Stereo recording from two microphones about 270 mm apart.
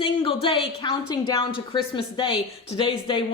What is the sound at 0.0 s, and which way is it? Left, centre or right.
A woman's voice, centre.